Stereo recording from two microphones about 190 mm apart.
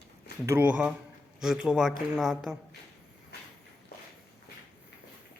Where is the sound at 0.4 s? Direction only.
10° right (ahead or behind).